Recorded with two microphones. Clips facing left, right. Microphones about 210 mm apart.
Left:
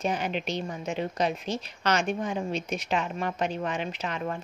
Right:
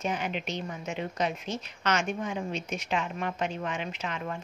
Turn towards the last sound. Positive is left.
turn(degrees=40)  # may be behind; listen again after turning